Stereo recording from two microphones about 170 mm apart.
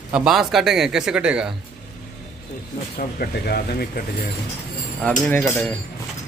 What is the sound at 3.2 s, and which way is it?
Speech, 65° left (ahead or behind).